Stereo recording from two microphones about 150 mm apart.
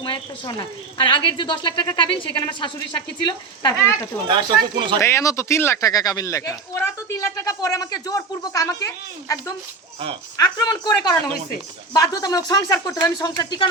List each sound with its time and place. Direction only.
0.0 s a woman's voice: 35° left (ahead or behind)
4.3 s speech: 30° right (ahead or behind)
4.9 s speech: 20° left (ahead or behind)
10.3 s speech: 25° left (ahead or behind)